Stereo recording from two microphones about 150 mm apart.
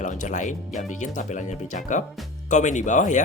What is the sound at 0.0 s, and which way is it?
Speech, 55° left (ahead or behind).